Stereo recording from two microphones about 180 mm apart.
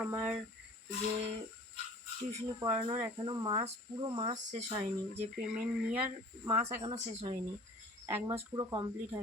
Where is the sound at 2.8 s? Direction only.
30° right (ahead or behind).